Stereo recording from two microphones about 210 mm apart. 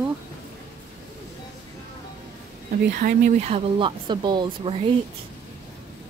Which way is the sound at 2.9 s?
40° right (ahead or behind).